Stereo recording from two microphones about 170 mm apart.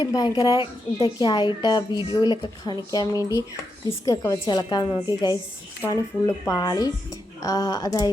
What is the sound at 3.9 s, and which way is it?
A woman's voice, 20° left (ahead or behind).